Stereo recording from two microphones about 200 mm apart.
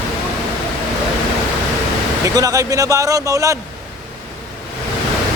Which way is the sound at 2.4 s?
15° right (ahead or behind).